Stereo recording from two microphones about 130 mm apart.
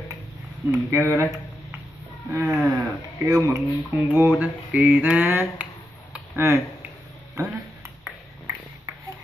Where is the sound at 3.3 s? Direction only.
25° right (ahead or behind).